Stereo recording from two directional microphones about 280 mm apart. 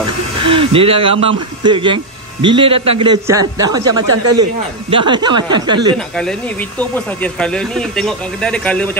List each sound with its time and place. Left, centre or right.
0.4 s a man's voice: centre
7.3 s speech: centre